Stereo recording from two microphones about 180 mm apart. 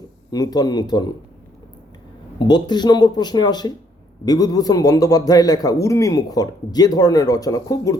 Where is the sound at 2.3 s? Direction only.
25° left (ahead or behind).